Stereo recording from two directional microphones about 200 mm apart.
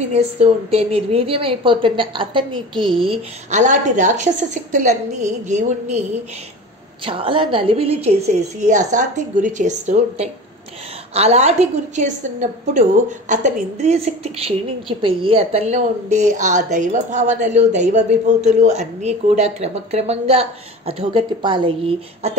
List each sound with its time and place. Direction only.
0.4 s a woman's voice: 30° right (ahead or behind)
7.1 s a woman's voice: 25° right (ahead or behind)